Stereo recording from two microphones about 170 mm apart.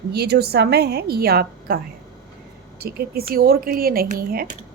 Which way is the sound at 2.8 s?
65° right (ahead or behind).